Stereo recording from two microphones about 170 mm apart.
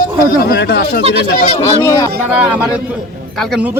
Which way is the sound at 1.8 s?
15° left (ahead or behind).